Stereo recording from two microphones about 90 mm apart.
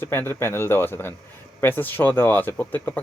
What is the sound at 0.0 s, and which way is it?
Speech, 30° left (ahead or behind).